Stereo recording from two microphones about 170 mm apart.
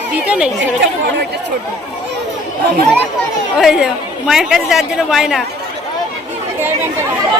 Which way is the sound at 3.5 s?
5° right (ahead or behind).